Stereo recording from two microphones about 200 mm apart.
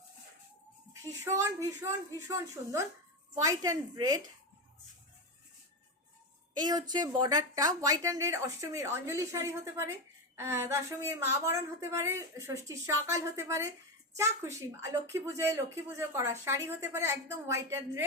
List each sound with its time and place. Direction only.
1.2 s a woman's voice: 15° right (ahead or behind)
6.6 s a woman's voice: 20° right (ahead or behind)